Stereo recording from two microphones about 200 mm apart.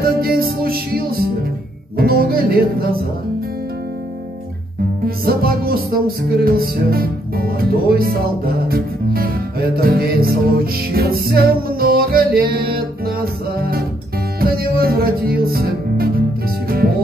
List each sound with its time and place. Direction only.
0.0 s music: 50° right (ahead or behind)
5.0 s music: 50° right (ahead or behind)